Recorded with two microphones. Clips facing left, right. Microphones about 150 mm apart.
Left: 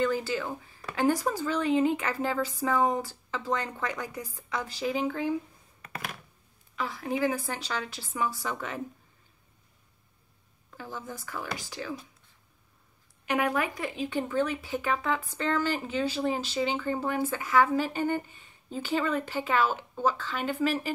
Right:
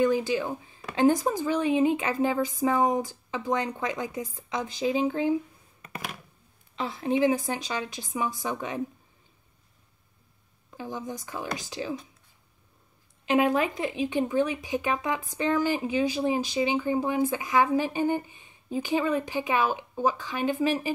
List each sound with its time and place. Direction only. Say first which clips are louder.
0.0 s speech: right 4 dB; 15° right (ahead or behind)
5.8 s a sound: right 1 dB; 20° right (ahead or behind)
6.7 s speech: right 4 dB; 25° right (ahead or behind)
10.7 s speech: right 5 dB; 15° right (ahead or behind)
13.2 s speech: right 5 dB; 20° right (ahead or behind)